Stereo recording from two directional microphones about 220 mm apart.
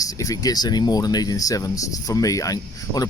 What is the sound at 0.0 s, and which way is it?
Speech, 15° left (ahead or behind).